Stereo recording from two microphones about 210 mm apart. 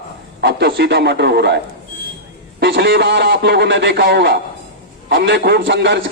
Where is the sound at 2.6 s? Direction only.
55° right (ahead or behind).